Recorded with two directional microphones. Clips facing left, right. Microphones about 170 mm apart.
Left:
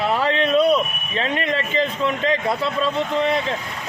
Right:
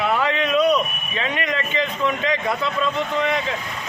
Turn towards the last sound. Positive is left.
turn(degrees=30)  # may be behind; listen again after turning